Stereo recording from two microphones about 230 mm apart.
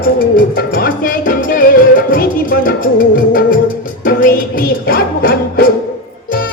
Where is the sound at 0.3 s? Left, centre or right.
Left.